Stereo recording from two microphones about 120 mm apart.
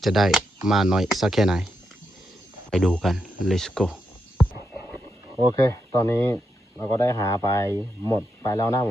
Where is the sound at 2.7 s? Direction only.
5° left (ahead or behind).